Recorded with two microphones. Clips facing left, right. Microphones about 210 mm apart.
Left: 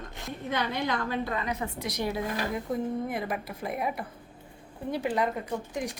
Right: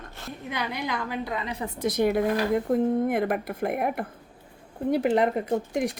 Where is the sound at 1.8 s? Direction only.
50° right (ahead or behind).